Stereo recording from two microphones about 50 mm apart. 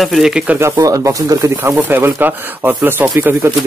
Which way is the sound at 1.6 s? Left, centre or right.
Right.